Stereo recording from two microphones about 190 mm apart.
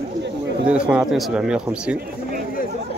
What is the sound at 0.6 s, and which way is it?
Speech, 5° right (ahead or behind).